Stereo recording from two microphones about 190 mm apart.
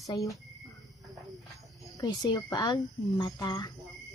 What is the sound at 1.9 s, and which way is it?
A woman's voice, 20° left (ahead or behind).